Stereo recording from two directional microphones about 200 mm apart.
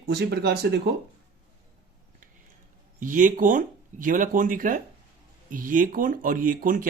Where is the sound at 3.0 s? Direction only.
40° right (ahead or behind).